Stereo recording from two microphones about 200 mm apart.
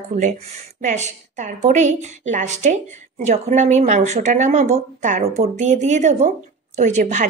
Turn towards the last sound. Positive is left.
turn(degrees=-35)  # may be behind; listen again after turning